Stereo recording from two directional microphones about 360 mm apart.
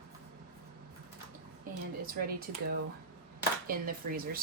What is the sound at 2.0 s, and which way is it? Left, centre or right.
Speech, right.